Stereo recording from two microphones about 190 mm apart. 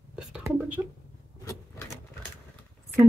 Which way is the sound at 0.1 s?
5° right (ahead or behind).